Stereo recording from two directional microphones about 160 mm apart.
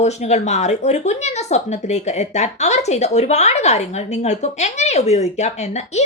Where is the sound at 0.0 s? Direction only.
45° left (ahead or behind).